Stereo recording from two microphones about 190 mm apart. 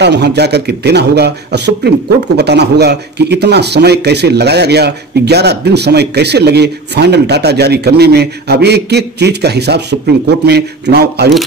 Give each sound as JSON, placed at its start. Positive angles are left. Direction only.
{"t": 0.0, "sound": "a man's voice", "side_deg": -65}